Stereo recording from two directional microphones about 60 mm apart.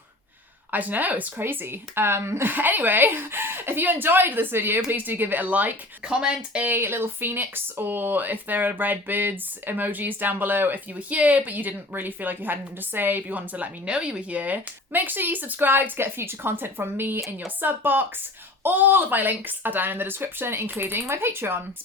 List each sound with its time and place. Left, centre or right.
0.7 s speech: right
2.5 s speech: right
6.1 s speech: centre
6.7 s speech: right